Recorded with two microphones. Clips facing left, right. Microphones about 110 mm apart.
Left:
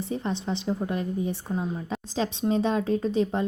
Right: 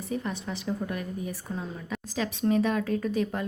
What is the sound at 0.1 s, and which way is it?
A woman's voice, 30° left (ahead or behind).